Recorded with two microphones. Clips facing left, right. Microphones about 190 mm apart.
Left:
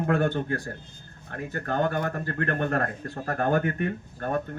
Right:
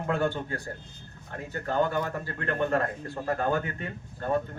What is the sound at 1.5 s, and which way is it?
Speech, 55° left (ahead or behind).